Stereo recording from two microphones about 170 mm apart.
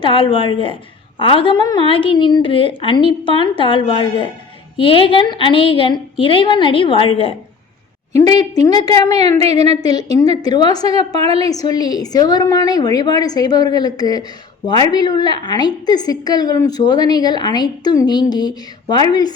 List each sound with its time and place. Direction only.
0.0 s a woman's voice: 30° left (ahead or behind)
8.1 s a woman's voice: 20° left (ahead or behind)
11.2 s a woman's voice: 35° right (ahead or behind)
11.7 s a woman's voice: 25° left (ahead or behind)